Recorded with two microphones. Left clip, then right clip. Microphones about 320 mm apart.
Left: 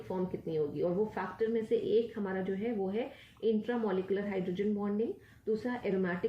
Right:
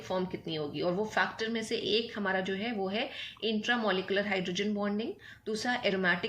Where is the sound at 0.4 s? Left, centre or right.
Right.